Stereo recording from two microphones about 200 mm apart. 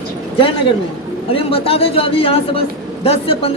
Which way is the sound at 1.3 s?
30° left (ahead or behind).